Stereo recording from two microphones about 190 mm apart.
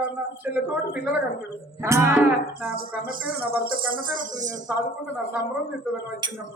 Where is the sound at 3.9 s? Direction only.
45° right (ahead or behind).